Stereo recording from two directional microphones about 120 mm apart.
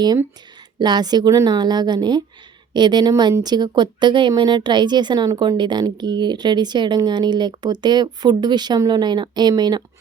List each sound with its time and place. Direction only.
0.8 s speech: 35° right (ahead or behind)